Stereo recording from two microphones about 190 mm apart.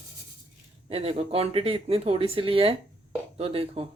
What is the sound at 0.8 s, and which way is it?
Speech, 30° right (ahead or behind).